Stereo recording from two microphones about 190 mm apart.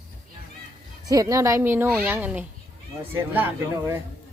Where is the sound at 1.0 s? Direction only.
20° right (ahead or behind).